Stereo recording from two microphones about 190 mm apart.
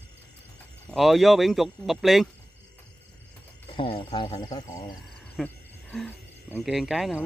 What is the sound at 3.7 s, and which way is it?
Speech, 30° left (ahead or behind).